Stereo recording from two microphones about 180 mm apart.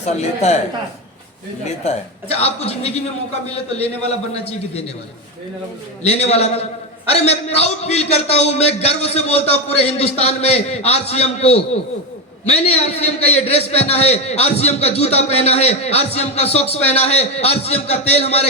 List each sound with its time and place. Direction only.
0.0 s a man's voice: 40° left (ahead or behind)
1.6 s a man's voice: 35° left (ahead or behind)
6.0 s a man's voice: 35° left (ahead or behind)